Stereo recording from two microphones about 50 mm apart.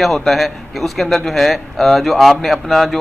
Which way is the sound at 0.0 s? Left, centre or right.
Centre.